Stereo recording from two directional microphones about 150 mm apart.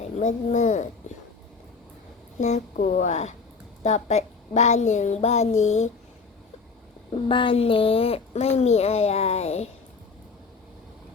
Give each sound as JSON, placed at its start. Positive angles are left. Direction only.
{"t": 0.2, "sound": "speech", "side_deg": 55}
{"t": 2.4, "sound": "speech", "side_deg": 55}
{"t": 7.1, "sound": "speech", "side_deg": 35}